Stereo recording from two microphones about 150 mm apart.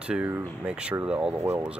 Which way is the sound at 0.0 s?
10° right (ahead or behind).